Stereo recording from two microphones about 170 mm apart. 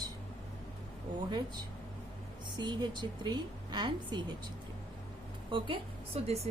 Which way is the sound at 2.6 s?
25° right (ahead or behind).